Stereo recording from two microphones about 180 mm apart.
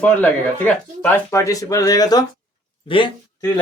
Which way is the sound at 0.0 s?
10° left (ahead or behind).